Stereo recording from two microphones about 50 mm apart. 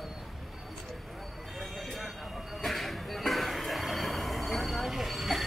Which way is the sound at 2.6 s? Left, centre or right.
Centre.